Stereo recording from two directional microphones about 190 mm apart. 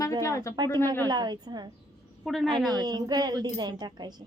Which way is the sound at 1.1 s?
20° right (ahead or behind).